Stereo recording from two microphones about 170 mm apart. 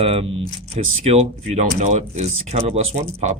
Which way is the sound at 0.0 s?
35° right (ahead or behind).